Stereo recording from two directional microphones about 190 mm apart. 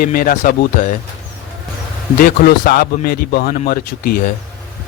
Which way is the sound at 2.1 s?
50° left (ahead or behind).